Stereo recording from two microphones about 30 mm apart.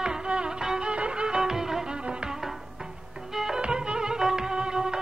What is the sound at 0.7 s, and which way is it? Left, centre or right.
Violin, right.